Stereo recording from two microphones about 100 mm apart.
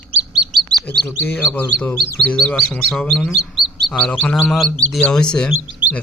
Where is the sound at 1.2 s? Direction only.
15° left (ahead or behind).